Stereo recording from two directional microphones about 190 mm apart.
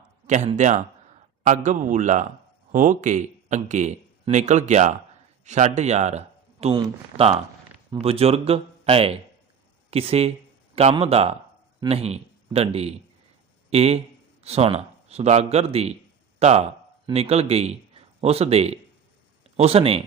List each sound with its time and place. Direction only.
0.3 s a man's voice: 40° right (ahead or behind)